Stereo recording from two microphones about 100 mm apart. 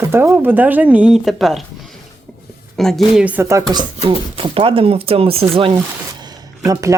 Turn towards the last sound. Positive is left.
turn(degrees=-30)  # may be behind; listen again after turning